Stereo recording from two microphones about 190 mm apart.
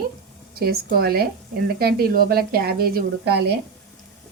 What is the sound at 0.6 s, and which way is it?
A woman's voice, 55° right (ahead or behind).